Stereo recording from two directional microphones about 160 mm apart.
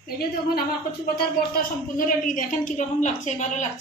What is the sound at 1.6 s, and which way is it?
A woman's voice, 60° left (ahead or behind).